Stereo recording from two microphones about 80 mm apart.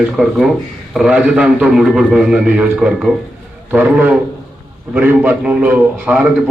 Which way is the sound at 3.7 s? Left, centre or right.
Right.